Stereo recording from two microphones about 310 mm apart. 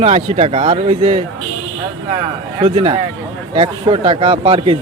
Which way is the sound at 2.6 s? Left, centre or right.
Centre.